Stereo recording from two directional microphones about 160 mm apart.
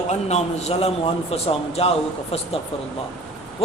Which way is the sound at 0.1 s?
45° left (ahead or behind).